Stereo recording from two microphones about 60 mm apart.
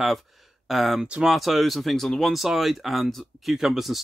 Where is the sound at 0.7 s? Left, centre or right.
Centre.